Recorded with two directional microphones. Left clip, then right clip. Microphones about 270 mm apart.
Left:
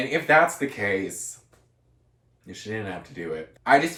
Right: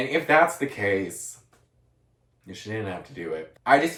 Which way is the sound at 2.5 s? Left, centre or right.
Centre.